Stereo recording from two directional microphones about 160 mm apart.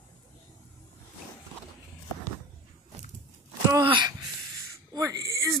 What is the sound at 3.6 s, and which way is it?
Wail, 30° right (ahead or behind).